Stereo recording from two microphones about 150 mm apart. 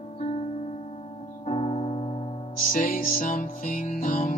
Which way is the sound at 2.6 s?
65° left (ahead or behind).